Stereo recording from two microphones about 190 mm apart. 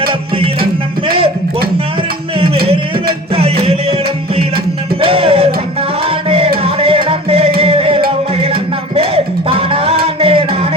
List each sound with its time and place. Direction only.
3.3 s music: 30° right (ahead or behind)
4.9 s music: 30° right (ahead or behind)